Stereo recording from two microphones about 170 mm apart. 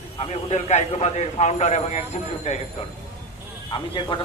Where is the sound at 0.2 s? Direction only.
40° left (ahead or behind).